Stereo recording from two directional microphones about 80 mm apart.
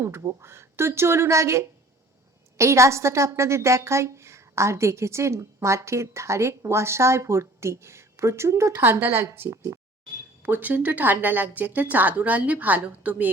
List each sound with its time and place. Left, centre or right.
0.0 s a woman's voice: right
8.7 s a woman's voice: right
10.4 s speech: right